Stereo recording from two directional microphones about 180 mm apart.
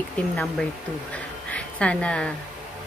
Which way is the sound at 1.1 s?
10° left (ahead or behind).